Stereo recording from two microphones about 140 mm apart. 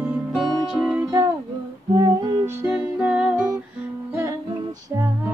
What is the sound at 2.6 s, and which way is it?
Music, 10° right (ahead or behind).